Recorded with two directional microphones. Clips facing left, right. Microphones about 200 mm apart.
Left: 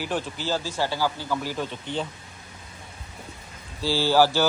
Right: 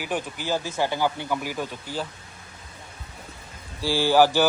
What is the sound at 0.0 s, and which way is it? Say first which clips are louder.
A man's voice: left 1 dB; 15° right (ahead or behind).